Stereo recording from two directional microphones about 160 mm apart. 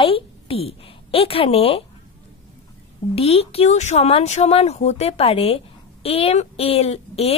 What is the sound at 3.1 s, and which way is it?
Speech, 35° left (ahead or behind).